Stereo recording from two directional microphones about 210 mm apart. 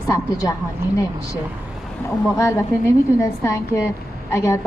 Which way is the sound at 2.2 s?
15° left (ahead or behind).